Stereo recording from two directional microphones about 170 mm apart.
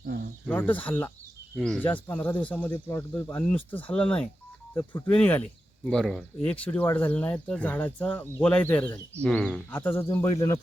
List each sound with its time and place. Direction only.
0.0 s cricket: 60° right (ahead or behind)
0.4 s speech: 10° left (ahead or behind)